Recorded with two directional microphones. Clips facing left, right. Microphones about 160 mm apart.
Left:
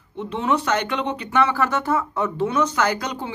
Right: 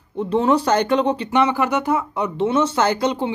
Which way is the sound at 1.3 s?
20° right (ahead or behind).